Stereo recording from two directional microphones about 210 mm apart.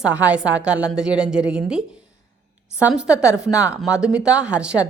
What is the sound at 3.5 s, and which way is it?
Speech, 15° left (ahead or behind).